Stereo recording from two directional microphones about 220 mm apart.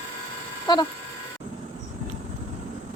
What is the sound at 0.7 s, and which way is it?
Speech, 20° left (ahead or behind).